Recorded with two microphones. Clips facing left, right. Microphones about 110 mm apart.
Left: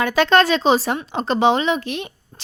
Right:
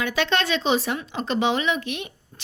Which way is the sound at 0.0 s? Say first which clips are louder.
Left 8 dB; 40° left (ahead or behind).